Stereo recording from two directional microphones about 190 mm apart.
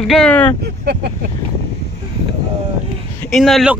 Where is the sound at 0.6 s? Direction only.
60° right (ahead or behind).